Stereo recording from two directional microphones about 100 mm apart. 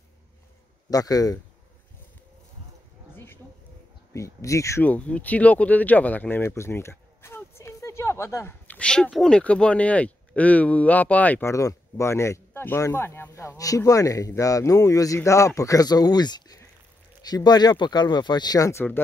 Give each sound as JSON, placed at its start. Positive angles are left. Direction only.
{"t": 0.8, "sound": "speech", "side_deg": 40}
{"t": 4.1, "sound": "speech", "side_deg": 30}
{"t": 4.8, "sound": "speech", "side_deg": 15}
{"t": 8.6, "sound": "a sound", "side_deg": 10}
{"t": 9.1, "sound": "speech", "side_deg": 5}
{"t": 11.4, "sound": "speech", "side_deg": 30}